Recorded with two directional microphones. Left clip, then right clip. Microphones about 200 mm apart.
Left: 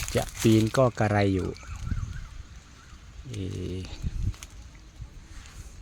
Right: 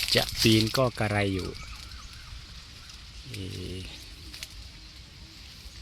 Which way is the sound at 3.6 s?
25° left (ahead or behind).